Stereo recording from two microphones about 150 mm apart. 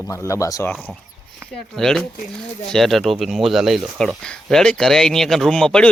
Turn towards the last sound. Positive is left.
turn(degrees=5)  # may be behind; listen again after turning